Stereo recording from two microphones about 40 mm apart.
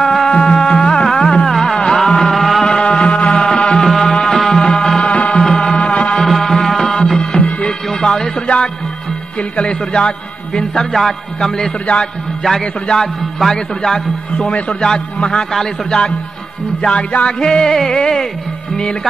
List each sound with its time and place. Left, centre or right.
0.0 s music: centre
0.3 s music: centre
2.6 s music: centre
3.4 s music: centre
5.0 s music: left
6.2 s music: centre
7.2 s music: left
9.4 s a man's voice: left
10.9 s music: centre
12.8 s music: centre
14.4 s a man's voice: left
15.5 s music: centre
16.9 s a man's voice: left
17.4 s music: centre